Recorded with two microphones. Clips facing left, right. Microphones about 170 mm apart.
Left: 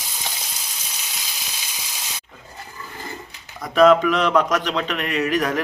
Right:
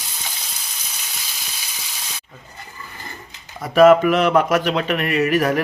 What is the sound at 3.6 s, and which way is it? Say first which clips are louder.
Speech: right 3 dB; 5° right (ahead or behind).